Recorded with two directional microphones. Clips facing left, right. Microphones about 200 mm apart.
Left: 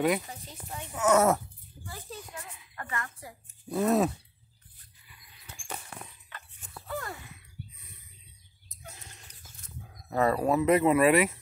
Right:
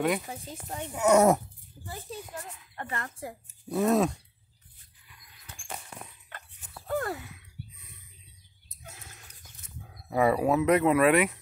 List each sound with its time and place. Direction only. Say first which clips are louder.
0.3 s speech: right 4 dB; 50° right (ahead or behind)
0.9 s speech: right 2 dB; 15° right (ahead or behind)
2.7 s a woman's voice: right 1 dB; 30° right (ahead or behind)
3.6 s speech: right 1 dB; centre (ahead or behind)
5.0 s rodents: even; 5° left (ahead or behind)
6.9 s gasp: right 7 dB; 50° right (ahead or behind)
8.8 s a sound: even; centre (ahead or behind)
9.9 s speech: right 2 dB; 10° right (ahead or behind)